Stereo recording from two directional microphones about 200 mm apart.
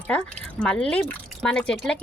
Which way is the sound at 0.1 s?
5° left (ahead or behind).